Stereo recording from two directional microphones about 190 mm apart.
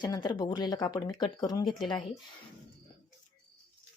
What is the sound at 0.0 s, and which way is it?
Speech, 20° left (ahead or behind).